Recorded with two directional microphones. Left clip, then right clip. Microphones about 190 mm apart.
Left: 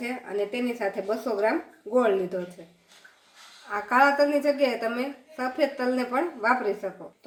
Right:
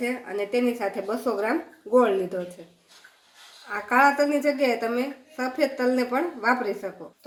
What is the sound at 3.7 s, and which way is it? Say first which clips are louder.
A woman's voice: right 1 dB; 15° right (ahead or behind).